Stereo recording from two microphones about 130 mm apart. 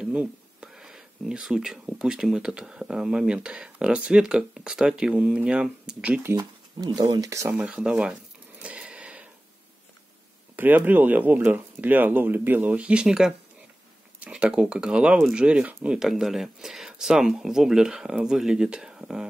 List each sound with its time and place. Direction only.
0.0 s speech: 10° right (ahead or behind)
6.3 s speech: 30° right (ahead or behind)
7.5 s speech: 5° right (ahead or behind)
8.6 s a sound: 5° right (ahead or behind)
10.5 s speech: 15° right (ahead or behind)